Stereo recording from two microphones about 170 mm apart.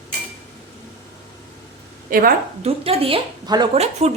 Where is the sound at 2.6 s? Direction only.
35° right (ahead or behind).